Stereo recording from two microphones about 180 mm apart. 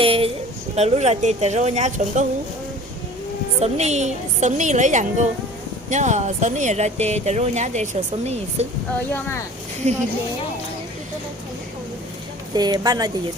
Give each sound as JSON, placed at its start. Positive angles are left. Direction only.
{"t": 0.0, "sound": "a sound", "side_deg": -30}
{"t": 0.8, "sound": "speech", "side_deg": -40}
{"t": 3.6, "sound": "speech", "side_deg": -40}
{"t": 9.8, "sound": "speech", "side_deg": -40}
{"t": 12.5, "sound": "speech", "side_deg": -20}